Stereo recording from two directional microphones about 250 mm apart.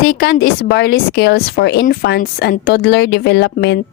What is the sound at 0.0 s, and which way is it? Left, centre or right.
Speech, left.